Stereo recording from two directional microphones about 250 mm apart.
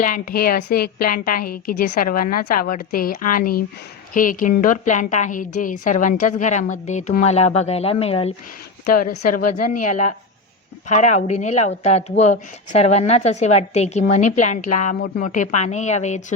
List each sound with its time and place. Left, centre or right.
0.0 s a woman's voice: left
8.9 s speech: left
9.7 s a woman's voice: left